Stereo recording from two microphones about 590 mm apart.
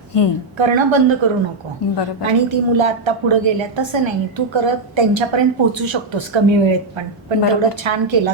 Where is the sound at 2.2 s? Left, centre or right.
Right.